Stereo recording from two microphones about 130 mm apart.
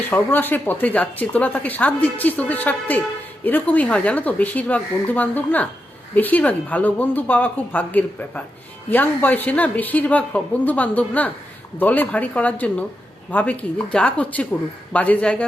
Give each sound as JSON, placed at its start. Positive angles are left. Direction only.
{"t": 0.1, "sound": "a woman's voice", "side_deg": 15}